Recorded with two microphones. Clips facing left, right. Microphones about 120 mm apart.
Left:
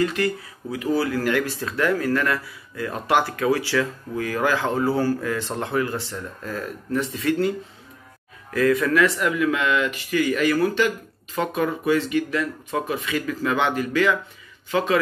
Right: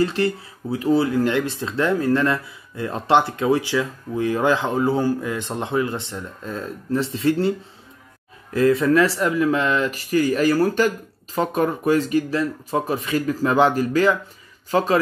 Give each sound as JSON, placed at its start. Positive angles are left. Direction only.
{"t": 0.0, "sound": "speech", "side_deg": -30}
{"t": 8.5, "sound": "speech", "side_deg": -30}